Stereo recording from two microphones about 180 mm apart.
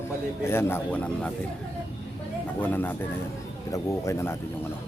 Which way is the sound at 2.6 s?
10° left (ahead or behind).